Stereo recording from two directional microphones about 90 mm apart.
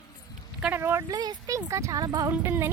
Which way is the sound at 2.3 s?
25° right (ahead or behind).